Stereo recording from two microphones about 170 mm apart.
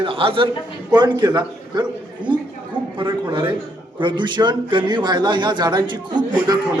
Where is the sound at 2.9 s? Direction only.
30° right (ahead or behind).